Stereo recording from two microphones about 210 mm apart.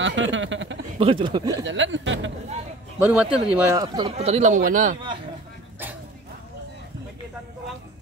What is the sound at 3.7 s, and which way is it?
Speech, 20° right (ahead or behind).